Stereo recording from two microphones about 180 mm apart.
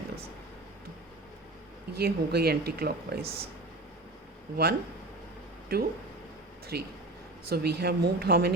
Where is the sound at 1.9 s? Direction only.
60° right (ahead or behind).